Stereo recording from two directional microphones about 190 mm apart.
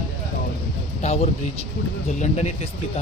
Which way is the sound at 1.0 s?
35° left (ahead or behind).